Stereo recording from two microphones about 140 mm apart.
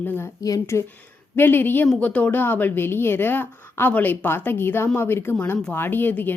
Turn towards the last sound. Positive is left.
turn(degrees=15)  # may be behind; listen again after turning